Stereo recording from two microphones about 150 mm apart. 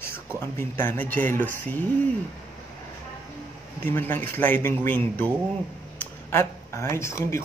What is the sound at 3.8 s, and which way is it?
Speech, 15° left (ahead or behind).